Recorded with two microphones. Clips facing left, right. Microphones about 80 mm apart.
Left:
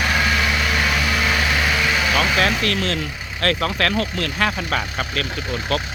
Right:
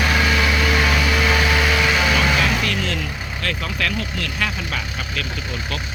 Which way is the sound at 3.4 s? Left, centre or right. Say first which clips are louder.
Left 5 dB; left.